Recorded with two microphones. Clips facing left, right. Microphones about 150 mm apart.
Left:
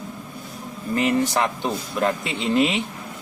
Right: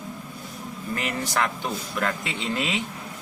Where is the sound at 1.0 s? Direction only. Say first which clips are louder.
Left 7 dB; 20° left (ahead or behind).